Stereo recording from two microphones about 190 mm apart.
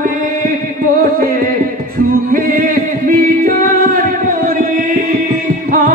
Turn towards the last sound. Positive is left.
turn(degrees=-50)  # may be behind; listen again after turning